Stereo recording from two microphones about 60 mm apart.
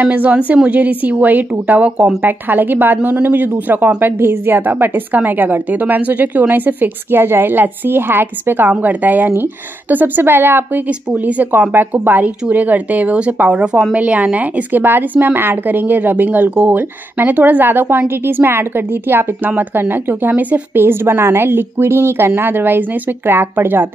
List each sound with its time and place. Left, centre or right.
0.0 s speech: right
10.9 s speech: right